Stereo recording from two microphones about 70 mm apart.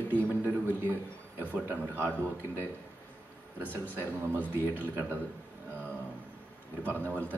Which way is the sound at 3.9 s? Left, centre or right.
Right.